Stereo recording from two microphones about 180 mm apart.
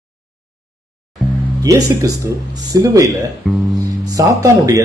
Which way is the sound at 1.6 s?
20° right (ahead or behind).